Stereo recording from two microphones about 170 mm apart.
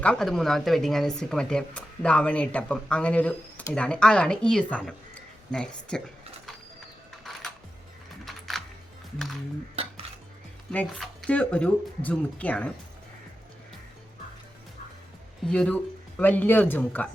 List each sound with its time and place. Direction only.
0.0 s speech: 5° left (ahead or behind)
8.2 s computer keyboard: centre (ahead or behind)
9.1 s speech: centre (ahead or behind)
9.8 s cutlery: 35° right (ahead or behind)
10.7 s speech: 5° left (ahead or behind)
15.4 s speech: 5° left (ahead or behind)